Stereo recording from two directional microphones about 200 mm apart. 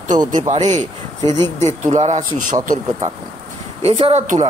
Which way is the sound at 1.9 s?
35° right (ahead or behind).